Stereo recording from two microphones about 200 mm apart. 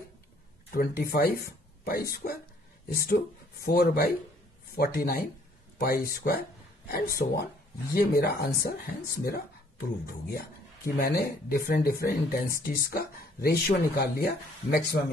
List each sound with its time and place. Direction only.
0.7 s speech: 50° left (ahead or behind)